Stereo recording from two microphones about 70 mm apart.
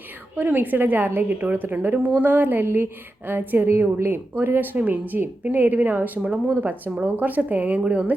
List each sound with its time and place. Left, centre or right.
0.3 s a woman's voice: right